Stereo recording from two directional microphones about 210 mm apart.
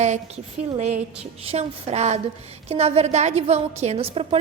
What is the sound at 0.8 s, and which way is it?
A woman's voice, 35° right (ahead or behind).